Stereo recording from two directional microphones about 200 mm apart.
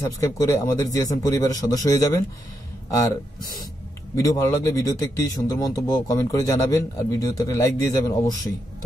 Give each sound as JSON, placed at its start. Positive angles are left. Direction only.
{"t": 0.0, "sound": "a man's voice", "side_deg": 15}